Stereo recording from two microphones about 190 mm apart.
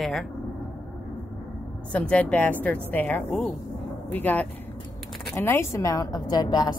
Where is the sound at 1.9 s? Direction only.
5° left (ahead or behind).